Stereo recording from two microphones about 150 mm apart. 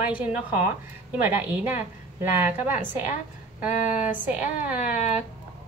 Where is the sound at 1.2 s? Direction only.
10° right (ahead or behind).